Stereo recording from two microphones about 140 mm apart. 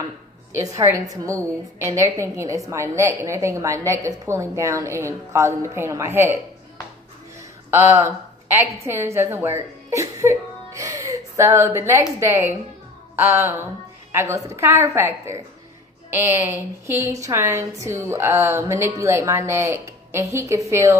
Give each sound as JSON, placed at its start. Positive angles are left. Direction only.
{"t": 0.5, "sound": "a woman's voice", "side_deg": -20}
{"t": 7.7, "sound": "a woman's voice", "side_deg": -20}